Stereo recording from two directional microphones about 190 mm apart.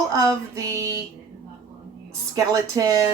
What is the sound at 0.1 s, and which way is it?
Female singing, 15° right (ahead or behind).